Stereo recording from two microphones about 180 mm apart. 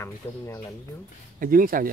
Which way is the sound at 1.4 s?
50° right (ahead or behind).